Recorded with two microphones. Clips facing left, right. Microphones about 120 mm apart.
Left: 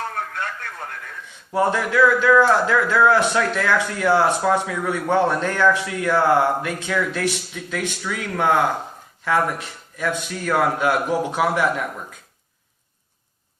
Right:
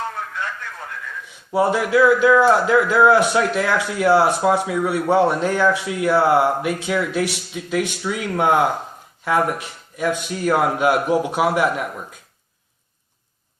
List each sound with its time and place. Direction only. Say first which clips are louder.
0.1 s radio: even; 55° left (ahead or behind)
1.5 s a man's voice: right 2 dB; 15° right (ahead or behind)